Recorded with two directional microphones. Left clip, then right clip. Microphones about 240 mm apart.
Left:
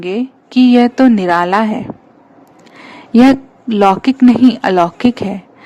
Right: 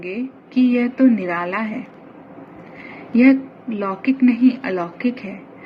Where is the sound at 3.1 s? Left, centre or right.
Left.